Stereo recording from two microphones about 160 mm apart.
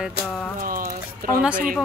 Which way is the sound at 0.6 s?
60° right (ahead or behind).